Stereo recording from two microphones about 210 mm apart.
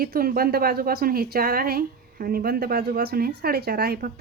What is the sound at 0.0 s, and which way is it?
Speech, 45° right (ahead or behind).